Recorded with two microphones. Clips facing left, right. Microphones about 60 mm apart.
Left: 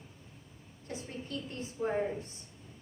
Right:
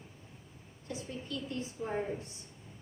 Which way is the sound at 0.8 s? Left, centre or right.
Left.